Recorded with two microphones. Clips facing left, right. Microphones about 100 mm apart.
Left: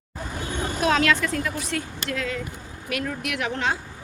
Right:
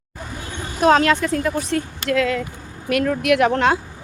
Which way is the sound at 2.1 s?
75° right (ahead or behind).